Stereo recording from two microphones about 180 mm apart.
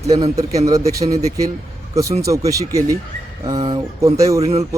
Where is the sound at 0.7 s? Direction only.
20° right (ahead or behind).